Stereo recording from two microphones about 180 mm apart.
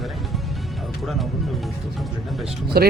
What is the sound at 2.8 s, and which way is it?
Speech, 60° right (ahead or behind).